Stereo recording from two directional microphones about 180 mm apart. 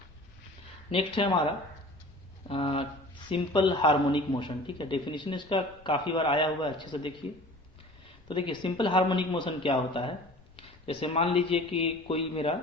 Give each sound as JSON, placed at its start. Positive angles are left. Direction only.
{"t": 0.9, "sound": "a man's voice", "side_deg": 30}
{"t": 2.5, "sound": "a man's voice", "side_deg": 30}
{"t": 8.3, "sound": "a man's voice", "side_deg": 25}